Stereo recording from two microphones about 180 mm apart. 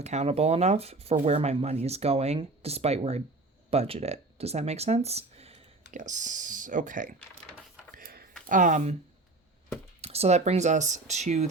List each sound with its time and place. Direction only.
0.0 s speech: 35° right (ahead or behind)
7.9 s a sound: 55° right (ahead or behind)
8.4 s speech: 45° right (ahead or behind)
10.0 s speech: 35° right (ahead or behind)